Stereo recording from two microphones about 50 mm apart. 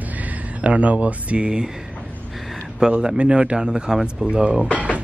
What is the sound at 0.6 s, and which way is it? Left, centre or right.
Speech, right.